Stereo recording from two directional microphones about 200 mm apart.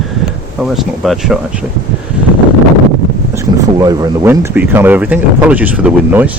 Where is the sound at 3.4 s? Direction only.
20° right (ahead or behind).